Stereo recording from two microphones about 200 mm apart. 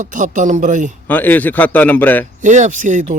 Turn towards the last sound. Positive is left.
turn(degrees=-40)  # may be behind; listen again after turning